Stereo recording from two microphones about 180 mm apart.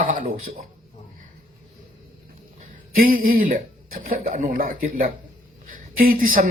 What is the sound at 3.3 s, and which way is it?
Speech, 50° right (ahead or behind).